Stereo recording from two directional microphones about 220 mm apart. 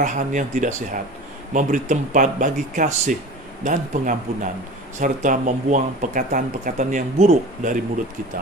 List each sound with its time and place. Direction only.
0.0 s speech: 35° right (ahead or behind)